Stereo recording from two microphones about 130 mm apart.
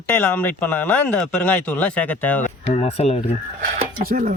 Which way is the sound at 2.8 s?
50° left (ahead or behind).